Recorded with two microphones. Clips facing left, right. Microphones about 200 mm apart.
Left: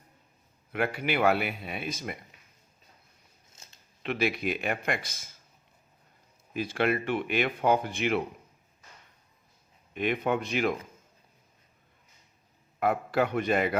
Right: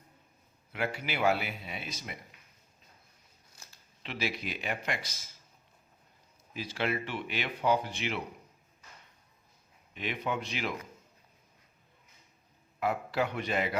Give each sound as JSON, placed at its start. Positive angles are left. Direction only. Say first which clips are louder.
{"t": 0.7, "sound": "speech", "louder": "left 5 dB", "side_deg": 55}
{"t": 3.5, "sound": "a sound", "louder": "even", "side_deg": 25}
{"t": 4.0, "sound": "speech", "louder": "left 7 dB", "side_deg": 55}
{"t": 6.5, "sound": "speech", "louder": "left 6 dB", "side_deg": 55}
{"t": 9.9, "sound": "speech", "louder": "left 7 dB", "side_deg": 55}
{"t": 12.8, "sound": "speech", "louder": "left 4 dB", "side_deg": 50}